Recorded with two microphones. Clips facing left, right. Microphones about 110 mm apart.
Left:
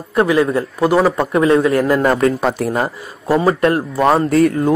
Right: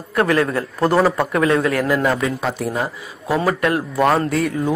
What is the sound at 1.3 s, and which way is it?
Speech, 25° left (ahead or behind).